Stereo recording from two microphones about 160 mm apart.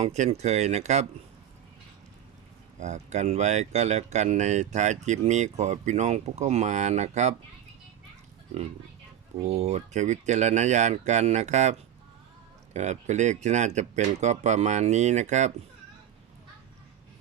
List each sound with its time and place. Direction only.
0.0 s speech: 45° right (ahead or behind)
2.8 s speech: 45° right (ahead or behind)
9.4 s speech: 40° right (ahead or behind)